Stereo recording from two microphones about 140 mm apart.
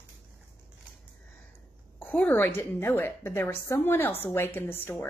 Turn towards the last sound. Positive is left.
turn(degrees=15)  # may be behind; listen again after turning